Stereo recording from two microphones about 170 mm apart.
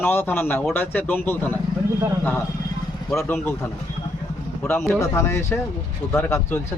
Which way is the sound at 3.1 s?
15° left (ahead or behind).